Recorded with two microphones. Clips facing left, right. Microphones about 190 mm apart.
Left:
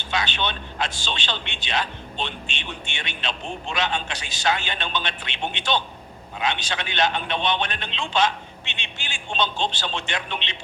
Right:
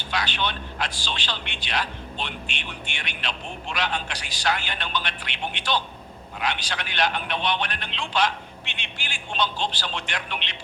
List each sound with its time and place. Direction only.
0.1 s a man's voice: 25° left (ahead or behind)